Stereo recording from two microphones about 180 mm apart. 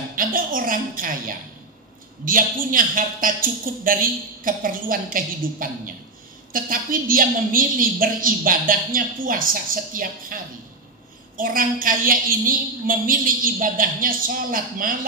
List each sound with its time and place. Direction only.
0.1 s a woman's voice: 50° right (ahead or behind)